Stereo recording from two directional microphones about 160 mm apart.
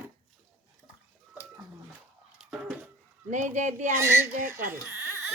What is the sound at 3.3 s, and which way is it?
Speech, 50° right (ahead or behind).